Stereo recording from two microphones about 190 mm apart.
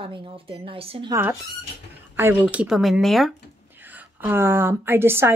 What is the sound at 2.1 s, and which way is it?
A woman's voice, 10° right (ahead or behind).